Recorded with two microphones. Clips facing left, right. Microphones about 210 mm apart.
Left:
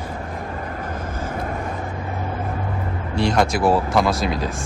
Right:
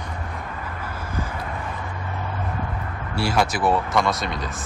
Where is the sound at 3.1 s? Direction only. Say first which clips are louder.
Left 3 dB; 5° right (ahead or behind).